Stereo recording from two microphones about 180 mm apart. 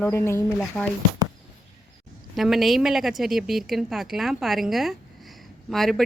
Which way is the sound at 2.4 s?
Centre (ahead or behind).